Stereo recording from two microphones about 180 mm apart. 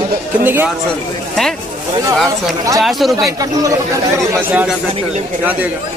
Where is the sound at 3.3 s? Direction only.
20° right (ahead or behind).